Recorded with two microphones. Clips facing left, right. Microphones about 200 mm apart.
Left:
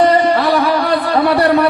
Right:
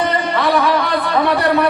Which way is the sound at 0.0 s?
35° left (ahead or behind).